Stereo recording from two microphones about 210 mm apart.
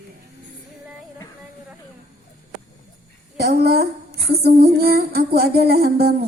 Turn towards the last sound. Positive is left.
turn(degrees=-45)  # may be behind; listen again after turning